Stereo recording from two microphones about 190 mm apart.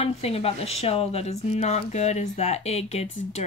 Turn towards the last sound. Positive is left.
turn(degrees=35)  # may be behind; listen again after turning